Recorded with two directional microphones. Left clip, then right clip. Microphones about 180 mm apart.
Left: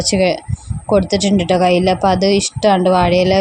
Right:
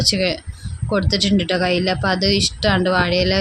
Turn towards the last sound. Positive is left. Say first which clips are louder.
# left 5 dB
turn(degrees=20)  # may be behind; listen again after turning